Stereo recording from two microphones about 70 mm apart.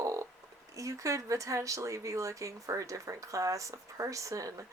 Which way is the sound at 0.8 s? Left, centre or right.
Right.